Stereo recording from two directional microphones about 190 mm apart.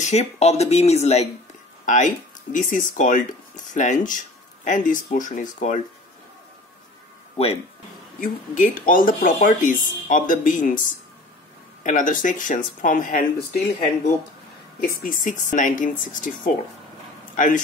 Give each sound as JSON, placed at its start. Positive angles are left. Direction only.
{"t": 0.0, "sound": "speech", "side_deg": 35}
{"t": 8.2, "sound": "speech", "side_deg": 45}
{"t": 11.8, "sound": "speech", "side_deg": 45}
{"t": 14.8, "sound": "speech", "side_deg": 50}